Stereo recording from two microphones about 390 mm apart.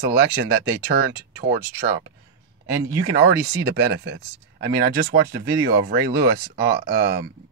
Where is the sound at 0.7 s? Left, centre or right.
Right.